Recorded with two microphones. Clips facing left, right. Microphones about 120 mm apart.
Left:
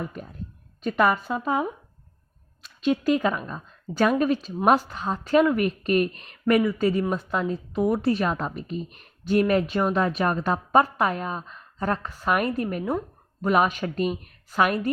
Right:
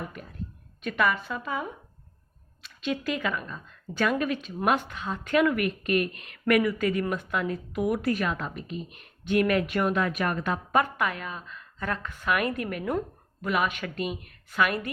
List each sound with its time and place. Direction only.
0.0 s a woman's voice: 35° left (ahead or behind)